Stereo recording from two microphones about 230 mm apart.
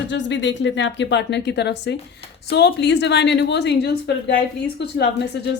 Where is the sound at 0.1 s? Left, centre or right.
Left.